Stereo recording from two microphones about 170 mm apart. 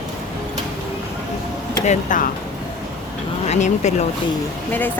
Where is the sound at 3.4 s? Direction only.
45° left (ahead or behind).